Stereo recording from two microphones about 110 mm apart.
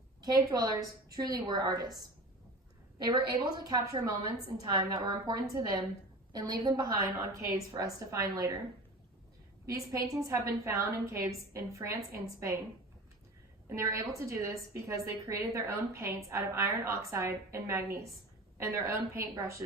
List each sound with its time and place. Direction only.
0.2 s a woman's voice: 35° right (ahead or behind)
3.5 s a woman's voice: 40° right (ahead or behind)
9.6 s a woman's voice: 30° right (ahead or behind)
13.7 s a woman's voice: 25° right (ahead or behind)